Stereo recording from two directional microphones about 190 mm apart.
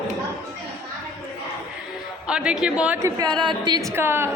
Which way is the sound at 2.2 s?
5° right (ahead or behind).